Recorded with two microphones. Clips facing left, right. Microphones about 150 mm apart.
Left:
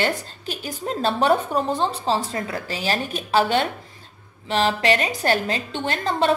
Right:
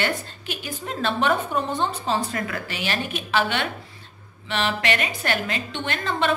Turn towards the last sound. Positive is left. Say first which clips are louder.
# left 3 dB
turn(degrees=40)  # may be behind; listen again after turning